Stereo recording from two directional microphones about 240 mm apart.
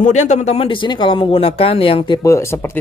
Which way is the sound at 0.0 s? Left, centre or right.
Left.